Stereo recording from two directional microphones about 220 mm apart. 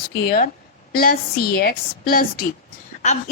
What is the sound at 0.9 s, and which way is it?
Speech, 40° left (ahead or behind).